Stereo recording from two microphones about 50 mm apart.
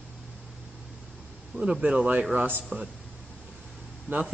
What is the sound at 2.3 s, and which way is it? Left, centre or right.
Speech, right.